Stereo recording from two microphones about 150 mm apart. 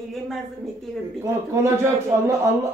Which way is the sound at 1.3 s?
20° right (ahead or behind).